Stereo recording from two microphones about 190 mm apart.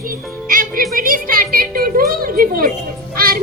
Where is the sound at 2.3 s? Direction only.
50° right (ahead or behind).